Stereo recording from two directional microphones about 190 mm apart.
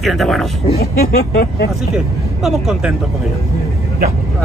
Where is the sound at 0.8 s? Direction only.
55° left (ahead or behind).